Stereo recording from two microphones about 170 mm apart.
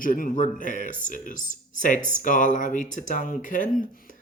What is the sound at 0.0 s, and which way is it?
Speech, 55° left (ahead or behind).